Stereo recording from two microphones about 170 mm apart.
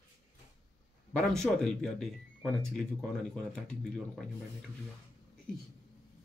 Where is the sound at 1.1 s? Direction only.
5° left (ahead or behind).